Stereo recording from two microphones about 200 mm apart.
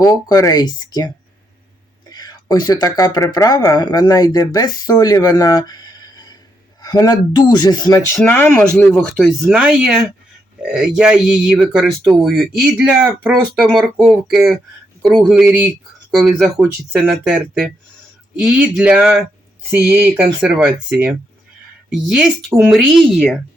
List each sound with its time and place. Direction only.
0.0 s speech: 15° left (ahead or behind); by 20.7 s 5° right (ahead or behind)
21.8 s speech: 5° right (ahead or behind)